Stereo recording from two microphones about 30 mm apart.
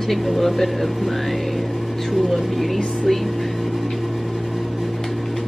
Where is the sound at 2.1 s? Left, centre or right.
Centre.